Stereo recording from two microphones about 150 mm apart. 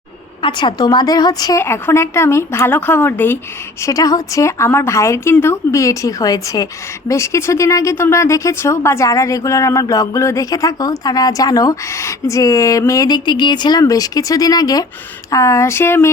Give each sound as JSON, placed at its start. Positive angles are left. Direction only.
{"t": 0.4, "sound": "a woman's voice", "side_deg": 30}
{"t": 3.8, "sound": "a woman's voice", "side_deg": 25}